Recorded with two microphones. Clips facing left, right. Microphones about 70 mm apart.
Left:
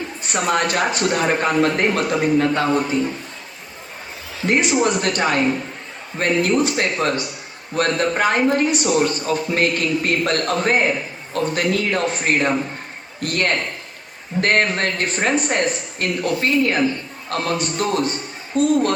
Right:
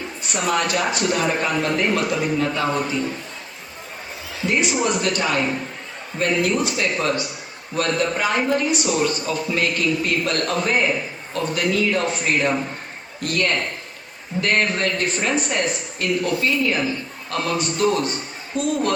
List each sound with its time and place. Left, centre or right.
0.3 s a man's voice: left
4.4 s a man's voice: left